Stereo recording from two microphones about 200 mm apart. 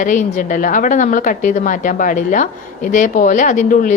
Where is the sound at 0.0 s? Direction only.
40° left (ahead or behind).